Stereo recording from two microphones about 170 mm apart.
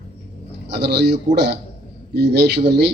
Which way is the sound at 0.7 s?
75° right (ahead or behind).